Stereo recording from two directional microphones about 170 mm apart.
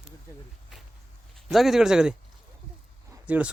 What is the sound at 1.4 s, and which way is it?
Speech, centre (ahead or behind).